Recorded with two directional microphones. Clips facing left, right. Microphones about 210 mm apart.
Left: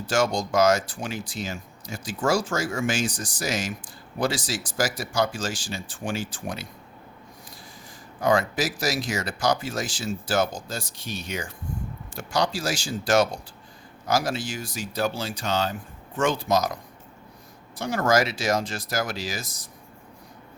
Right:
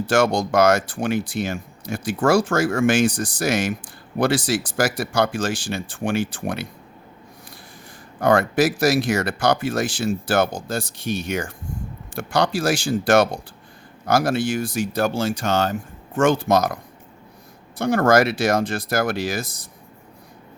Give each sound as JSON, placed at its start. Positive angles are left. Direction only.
{"t": 0.1, "sound": "speech", "side_deg": -60}
{"t": 8.2, "sound": "speech", "side_deg": -60}